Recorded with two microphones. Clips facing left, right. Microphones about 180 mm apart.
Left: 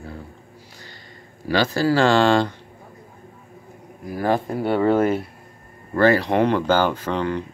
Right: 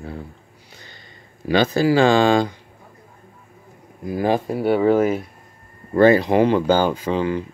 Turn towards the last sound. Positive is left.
turn(degrees=-5)  # may be behind; listen again after turning